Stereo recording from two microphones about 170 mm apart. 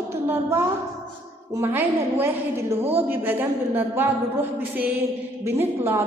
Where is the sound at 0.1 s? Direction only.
15° right (ahead or behind).